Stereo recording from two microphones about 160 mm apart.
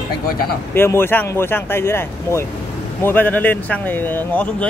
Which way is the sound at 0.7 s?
15° left (ahead or behind).